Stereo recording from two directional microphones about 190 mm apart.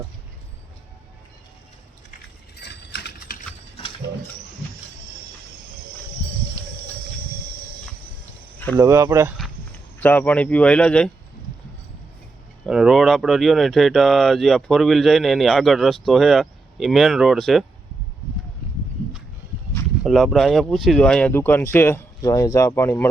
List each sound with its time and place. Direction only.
2.6 s typing: 60° left (ahead or behind)
8.7 s speech: 15° right (ahead or behind)
10.0 s speech: 10° left (ahead or behind)
12.6 s speech: centre (ahead or behind)
20.1 s speech: centre (ahead or behind)